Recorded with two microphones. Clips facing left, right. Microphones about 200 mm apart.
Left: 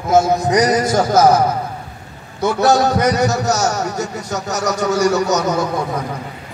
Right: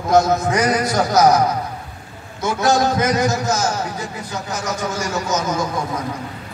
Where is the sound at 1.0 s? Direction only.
50° left (ahead or behind).